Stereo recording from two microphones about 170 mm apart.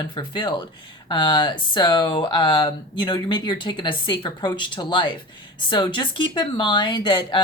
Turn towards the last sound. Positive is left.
turn(degrees=25)  # may be behind; listen again after turning